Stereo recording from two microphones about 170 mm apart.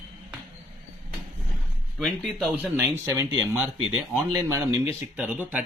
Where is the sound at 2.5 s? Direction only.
10° right (ahead or behind).